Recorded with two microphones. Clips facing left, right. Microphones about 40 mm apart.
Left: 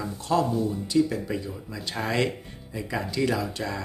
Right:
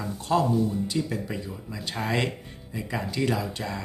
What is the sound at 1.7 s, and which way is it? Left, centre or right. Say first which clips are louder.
Speech: left 1 dB; right.